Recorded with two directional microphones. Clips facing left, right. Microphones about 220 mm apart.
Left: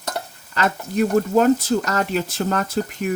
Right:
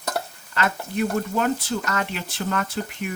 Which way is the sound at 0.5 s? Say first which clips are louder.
Left 4 dB; 40° left (ahead or behind).